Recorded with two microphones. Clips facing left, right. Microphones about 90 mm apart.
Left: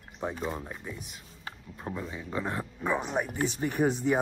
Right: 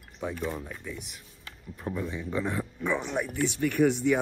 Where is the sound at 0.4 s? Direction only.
5° left (ahead or behind).